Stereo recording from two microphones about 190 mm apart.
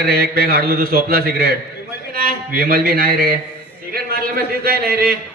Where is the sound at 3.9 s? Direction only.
50° right (ahead or behind).